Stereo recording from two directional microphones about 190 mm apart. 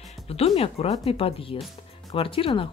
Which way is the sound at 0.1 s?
30° left (ahead or behind).